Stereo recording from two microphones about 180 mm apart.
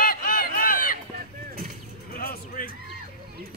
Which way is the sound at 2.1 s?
55° left (ahead or behind).